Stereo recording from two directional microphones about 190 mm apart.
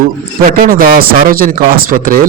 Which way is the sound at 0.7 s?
50° right (ahead or behind).